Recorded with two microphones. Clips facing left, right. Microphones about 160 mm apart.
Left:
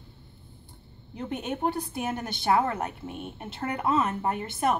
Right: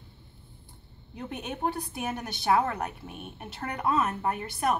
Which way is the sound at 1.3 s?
20° left (ahead or behind).